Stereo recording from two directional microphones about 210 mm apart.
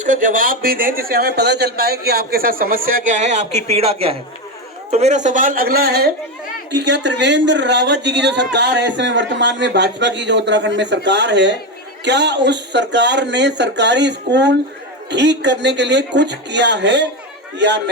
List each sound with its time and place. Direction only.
0.0 s a man's voice: 40° right (ahead or behind); by 17.1 s 55° right (ahead or behind)